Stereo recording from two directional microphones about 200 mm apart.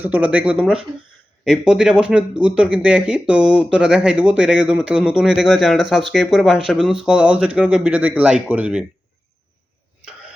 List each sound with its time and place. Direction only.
0.0 s speech: 5° right (ahead or behind)